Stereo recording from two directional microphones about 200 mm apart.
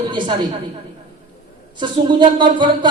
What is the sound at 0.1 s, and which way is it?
Speech, 25° right (ahead or behind).